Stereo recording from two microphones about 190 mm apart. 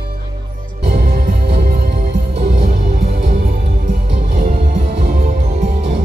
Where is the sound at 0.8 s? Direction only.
55° right (ahead or behind).